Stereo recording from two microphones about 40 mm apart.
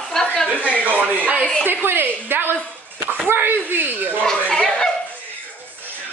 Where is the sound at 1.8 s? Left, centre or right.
Right.